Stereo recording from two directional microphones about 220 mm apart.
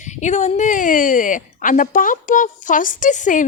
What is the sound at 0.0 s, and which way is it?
A woman's voice, 35° left (ahead or behind).